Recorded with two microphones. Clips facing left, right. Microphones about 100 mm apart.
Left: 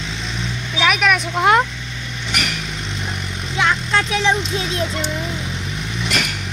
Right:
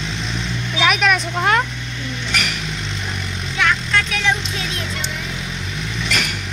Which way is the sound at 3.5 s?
25° left (ahead or behind).